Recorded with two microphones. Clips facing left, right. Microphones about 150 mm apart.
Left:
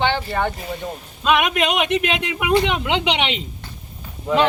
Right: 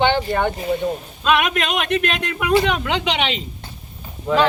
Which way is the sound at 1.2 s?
10° left (ahead or behind).